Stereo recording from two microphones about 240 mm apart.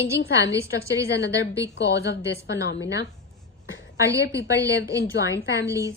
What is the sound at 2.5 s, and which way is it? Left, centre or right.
Speech, left.